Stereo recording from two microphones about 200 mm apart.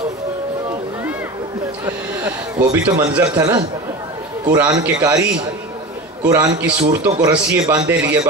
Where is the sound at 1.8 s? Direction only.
10° right (ahead or behind).